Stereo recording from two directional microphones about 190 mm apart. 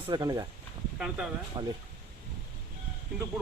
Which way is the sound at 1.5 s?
25° right (ahead or behind).